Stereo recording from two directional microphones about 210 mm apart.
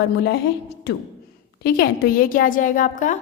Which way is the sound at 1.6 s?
50° left (ahead or behind).